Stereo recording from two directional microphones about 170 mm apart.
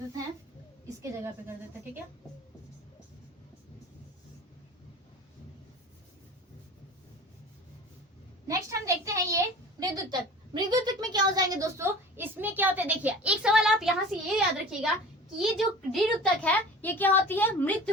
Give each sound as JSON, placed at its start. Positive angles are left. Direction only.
{"t": 1.2, "sound": "a woman's voice", "side_deg": -15}
{"t": 8.4, "sound": "a sound", "side_deg": -20}
{"t": 9.8, "sound": "a woman's voice", "side_deg": -25}